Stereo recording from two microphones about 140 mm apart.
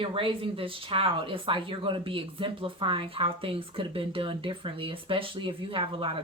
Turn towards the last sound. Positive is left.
turn(degrees=-35)  # may be behind; listen again after turning